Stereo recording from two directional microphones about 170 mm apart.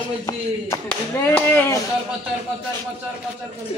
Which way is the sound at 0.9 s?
10° left (ahead or behind).